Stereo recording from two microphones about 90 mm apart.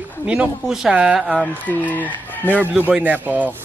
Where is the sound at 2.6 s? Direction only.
15° right (ahead or behind).